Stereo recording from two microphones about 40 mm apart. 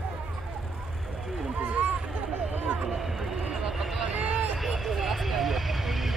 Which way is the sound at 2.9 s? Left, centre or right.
Centre.